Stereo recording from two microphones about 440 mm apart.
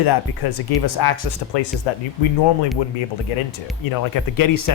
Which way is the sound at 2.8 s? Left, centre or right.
Left.